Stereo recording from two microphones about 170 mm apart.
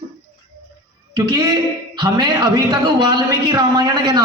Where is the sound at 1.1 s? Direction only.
25° right (ahead or behind).